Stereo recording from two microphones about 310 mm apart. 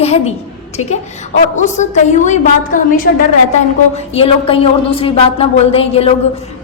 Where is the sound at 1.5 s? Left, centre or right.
Left.